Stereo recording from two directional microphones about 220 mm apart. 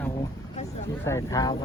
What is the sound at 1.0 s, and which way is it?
Speech, 15° left (ahead or behind).